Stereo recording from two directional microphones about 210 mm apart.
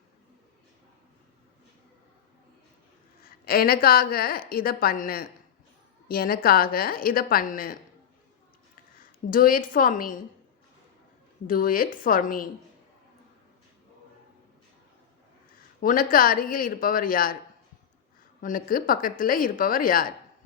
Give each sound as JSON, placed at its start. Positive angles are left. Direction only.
{"t": 3.2, "sound": "a woman's voice", "side_deg": 45}
{"t": 9.3, "sound": "a woman's voice", "side_deg": 40}
{"t": 11.4, "sound": "a woman's voice", "side_deg": 40}
{"t": 15.8, "sound": "a woman's voice", "side_deg": 40}
{"t": 18.3, "sound": "a woman's voice", "side_deg": 40}